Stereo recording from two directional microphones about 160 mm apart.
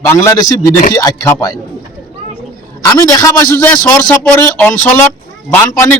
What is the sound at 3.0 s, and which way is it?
A man's voice, 20° left (ahead or behind).